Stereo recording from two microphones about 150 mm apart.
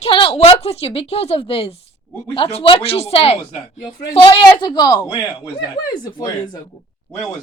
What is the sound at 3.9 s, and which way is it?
A woman's voice, 25° left (ahead or behind).